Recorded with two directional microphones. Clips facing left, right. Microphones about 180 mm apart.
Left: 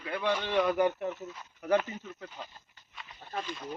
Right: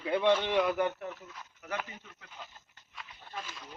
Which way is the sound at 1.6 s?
35° left (ahead or behind).